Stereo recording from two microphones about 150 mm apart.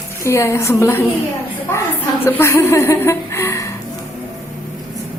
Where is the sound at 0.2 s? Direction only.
20° left (ahead or behind).